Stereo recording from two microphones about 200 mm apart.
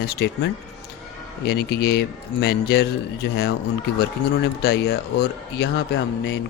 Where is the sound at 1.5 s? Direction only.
55° left (ahead or behind).